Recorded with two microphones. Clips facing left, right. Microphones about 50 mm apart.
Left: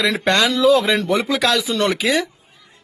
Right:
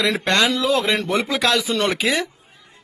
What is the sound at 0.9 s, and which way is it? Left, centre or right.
Speech, centre.